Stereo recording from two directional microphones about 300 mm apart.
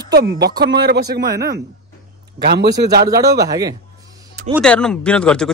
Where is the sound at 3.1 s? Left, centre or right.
Centre.